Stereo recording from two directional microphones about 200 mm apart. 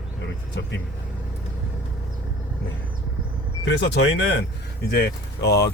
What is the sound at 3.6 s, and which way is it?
Speech, 60° left (ahead or behind).